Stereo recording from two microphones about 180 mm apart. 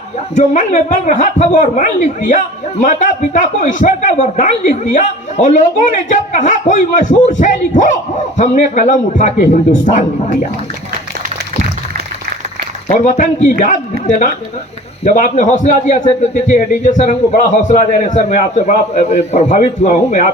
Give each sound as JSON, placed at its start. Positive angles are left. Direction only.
{"t": 0.3, "sound": "a man's voice", "side_deg": 40}
{"t": 12.9, "sound": "a man's voice", "side_deg": 40}
{"t": 15.0, "sound": "a man's voice", "side_deg": 45}